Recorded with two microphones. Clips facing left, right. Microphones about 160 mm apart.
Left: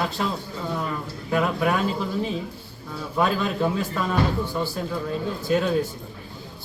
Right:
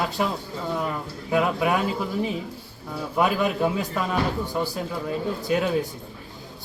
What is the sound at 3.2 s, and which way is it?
Speech, 15° right (ahead or behind).